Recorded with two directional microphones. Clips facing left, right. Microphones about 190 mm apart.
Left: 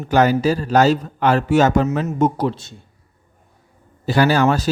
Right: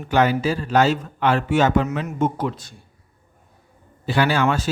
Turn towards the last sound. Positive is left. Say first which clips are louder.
# left 4 dB
turn(degrees=40)  # may be behind; listen again after turning